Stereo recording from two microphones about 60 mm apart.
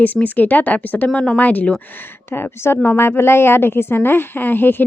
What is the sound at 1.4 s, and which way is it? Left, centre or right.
Speech, left.